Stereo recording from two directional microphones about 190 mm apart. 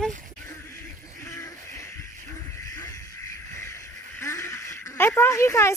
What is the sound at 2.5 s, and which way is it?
Music, 15° left (ahead or behind).